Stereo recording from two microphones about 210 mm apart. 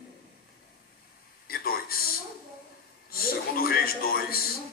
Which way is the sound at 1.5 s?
45° left (ahead or behind).